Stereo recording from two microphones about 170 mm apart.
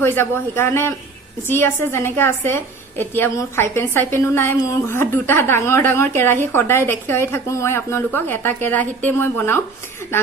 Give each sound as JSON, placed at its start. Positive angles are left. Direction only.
{"t": 0.0, "sound": "a woman's voice", "side_deg": 15}